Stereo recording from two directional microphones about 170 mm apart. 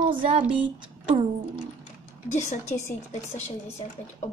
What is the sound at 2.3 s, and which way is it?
Speech, 45° left (ahead or behind).